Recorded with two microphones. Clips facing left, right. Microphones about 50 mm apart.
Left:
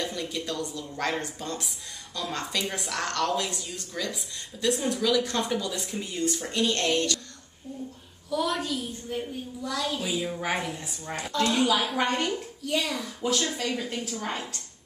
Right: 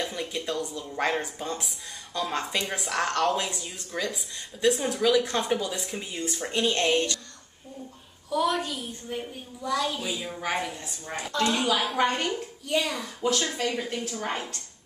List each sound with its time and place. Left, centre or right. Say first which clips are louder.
0.0 s a woman's voice: right 1 dB; centre
3.3 s a woman's voice: right 2 dB; centre
4.6 s a woman's voice: right 2 dB; centre
8.3 s a woman's voice: right 2 dB; centre
10.0 s a woman's voice: left 2 dB; centre
14.2 s a woman's voice: right 3 dB; centre